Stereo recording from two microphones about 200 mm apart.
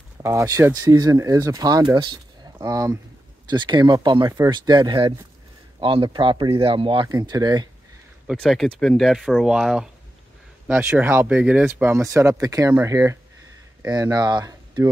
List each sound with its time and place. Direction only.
0.2 s speech: 15° right (ahead or behind)
8.3 s speech: centre (ahead or behind); by 14.9 s 15° right (ahead or behind)